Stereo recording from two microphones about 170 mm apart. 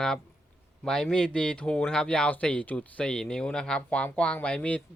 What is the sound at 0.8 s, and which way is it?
Speech, 5° left (ahead or behind).